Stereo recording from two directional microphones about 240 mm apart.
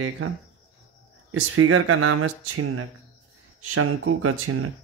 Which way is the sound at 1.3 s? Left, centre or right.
Right.